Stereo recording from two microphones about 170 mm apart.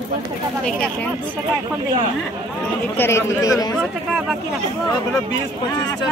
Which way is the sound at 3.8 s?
Centre (ahead or behind).